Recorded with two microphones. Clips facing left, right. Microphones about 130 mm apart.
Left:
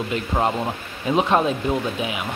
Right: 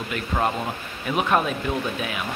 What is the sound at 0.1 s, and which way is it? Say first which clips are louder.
Speech: left 1 dB; 20° left (ahead or behind).